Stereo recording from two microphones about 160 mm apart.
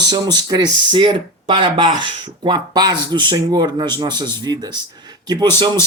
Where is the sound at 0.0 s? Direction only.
25° right (ahead or behind).